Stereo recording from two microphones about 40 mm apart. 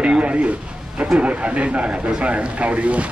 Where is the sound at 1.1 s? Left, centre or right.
Right.